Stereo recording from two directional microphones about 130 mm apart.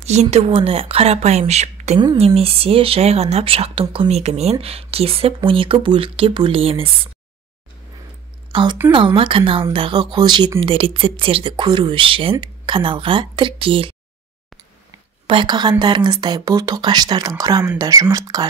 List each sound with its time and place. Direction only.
0.0 s speech: 60° right (ahead or behind)
8.5 s a woman's voice: 40° right (ahead or behind)
15.2 s speech: 35° right (ahead or behind)